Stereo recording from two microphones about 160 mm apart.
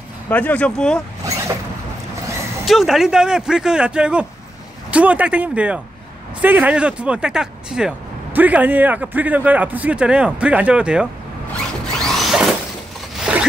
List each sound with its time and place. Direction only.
0.3 s speech: 10° left (ahead or behind)
1.2 s zipper: 20° right (ahead or behind)
2.6 s speech: centre (ahead or behind)
12.0 s music: centre (ahead or behind)
13.2 s zipper: 5° right (ahead or behind)